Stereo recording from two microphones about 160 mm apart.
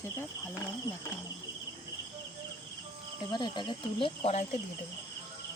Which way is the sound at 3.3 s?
30° left (ahead or behind).